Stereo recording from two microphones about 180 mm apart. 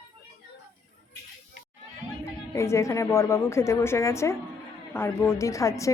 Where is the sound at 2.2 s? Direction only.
15° left (ahead or behind).